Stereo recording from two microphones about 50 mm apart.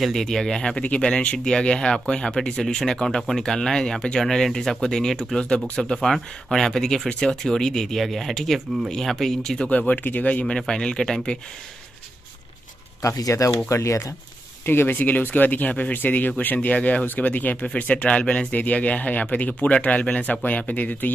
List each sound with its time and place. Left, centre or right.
0.0 s speech: centre
9.7 s speech: left
10.7 s speech: centre
13.0 s speech: left
13.7 s speech: left
14.7 s speech: left